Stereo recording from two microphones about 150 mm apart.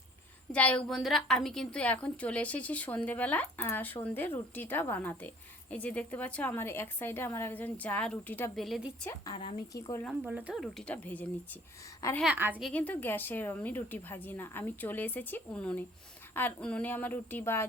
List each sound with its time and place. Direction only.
0.5 s a woman's voice: 10° left (ahead or behind)
8.5 s speech: centre (ahead or behind)
9.3 s speech: 35° left (ahead or behind)
9.7 s a woman's voice: 20° left (ahead or behind)
10.1 s speech: 10° right (ahead or behind)
10.6 s a woman's voice: 5° left (ahead or behind)
12.2 s speech: 10° right (ahead or behind)
12.6 s a woman's voice: 10° left (ahead or behind)